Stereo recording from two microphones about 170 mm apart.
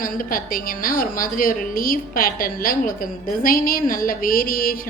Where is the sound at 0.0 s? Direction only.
55° left (ahead or behind).